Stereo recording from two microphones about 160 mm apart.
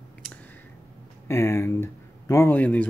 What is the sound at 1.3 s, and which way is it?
Speech, 15° left (ahead or behind).